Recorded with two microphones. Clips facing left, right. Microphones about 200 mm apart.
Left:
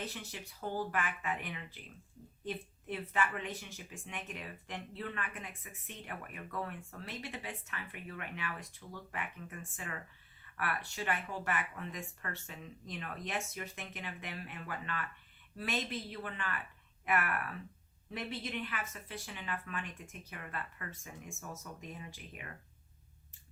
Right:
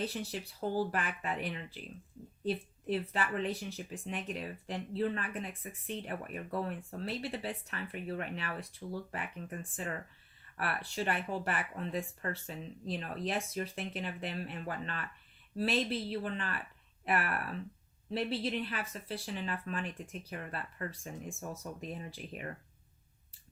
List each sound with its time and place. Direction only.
0.0 s speech: 30° right (ahead or behind)